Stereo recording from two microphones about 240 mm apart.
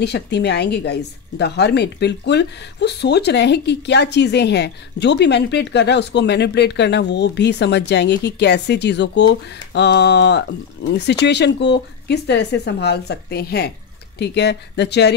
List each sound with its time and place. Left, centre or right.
0.0 s a woman's voice: left